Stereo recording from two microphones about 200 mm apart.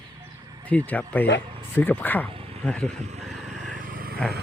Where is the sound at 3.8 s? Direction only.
45° right (ahead or behind).